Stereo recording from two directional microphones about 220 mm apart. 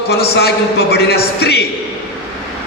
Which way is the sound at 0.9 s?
45° left (ahead or behind).